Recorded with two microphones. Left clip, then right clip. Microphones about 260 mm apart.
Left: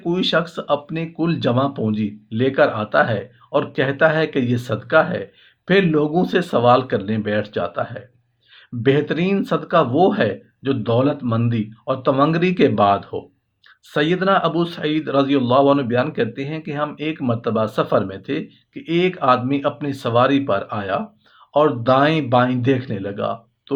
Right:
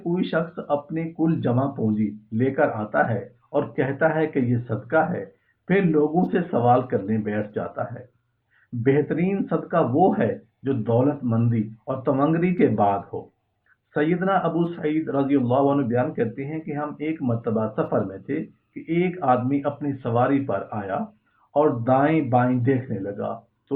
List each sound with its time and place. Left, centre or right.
0.1 s speech: left